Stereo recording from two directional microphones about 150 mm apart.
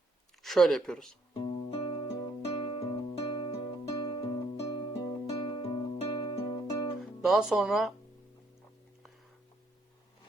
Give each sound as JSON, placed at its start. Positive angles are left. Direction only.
{"t": 0.4, "sound": "speech", "side_deg": 0}
{"t": 1.4, "sound": "music", "side_deg": 30}
{"t": 7.0, "sound": "speech", "side_deg": 0}